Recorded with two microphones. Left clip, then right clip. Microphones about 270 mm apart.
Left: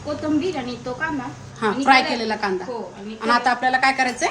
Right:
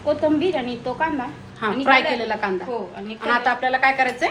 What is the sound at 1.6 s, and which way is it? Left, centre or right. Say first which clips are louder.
A woman's voice: left 1 dB; centre.